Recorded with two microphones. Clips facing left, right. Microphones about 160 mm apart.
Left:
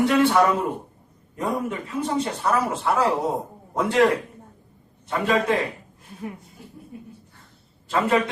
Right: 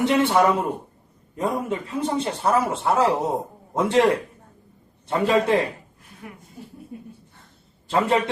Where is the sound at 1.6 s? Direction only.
25° right (ahead or behind).